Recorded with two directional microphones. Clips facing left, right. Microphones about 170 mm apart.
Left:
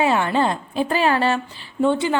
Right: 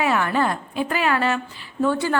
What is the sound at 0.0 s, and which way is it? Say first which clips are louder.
A woman's voice: left 2 dB; 25° left (ahead or behind).